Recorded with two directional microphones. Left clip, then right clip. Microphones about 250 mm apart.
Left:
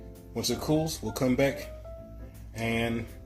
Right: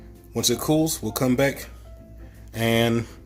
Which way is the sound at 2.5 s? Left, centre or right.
Right.